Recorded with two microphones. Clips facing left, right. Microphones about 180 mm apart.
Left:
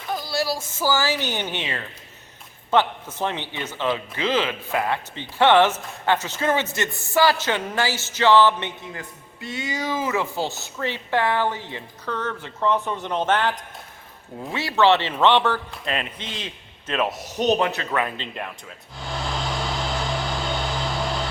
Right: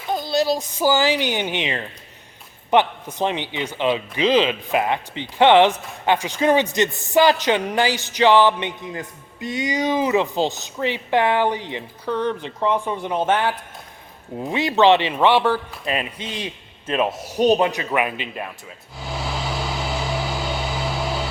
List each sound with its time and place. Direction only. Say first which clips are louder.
0.1 s speech: right 5 dB; 20° right (ahead or behind)
16.8 s speech: right 3 dB; 30° right (ahead or behind)
17.3 s speech: right 4 dB; 10° right (ahead or behind)
18.9 s vehicle: right 1 dB; 5° right (ahead or behind)